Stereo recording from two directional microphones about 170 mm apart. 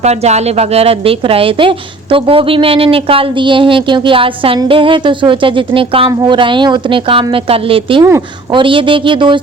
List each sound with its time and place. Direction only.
0.0 s a woman's voice: 40° right (ahead or behind)